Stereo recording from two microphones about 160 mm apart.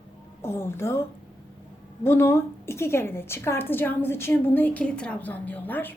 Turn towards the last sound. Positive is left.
turn(degrees=10)  # may be behind; listen again after turning